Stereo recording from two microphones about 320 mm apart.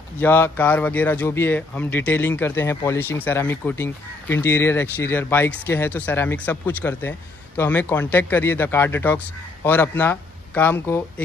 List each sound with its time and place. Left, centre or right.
0.2 s speech: centre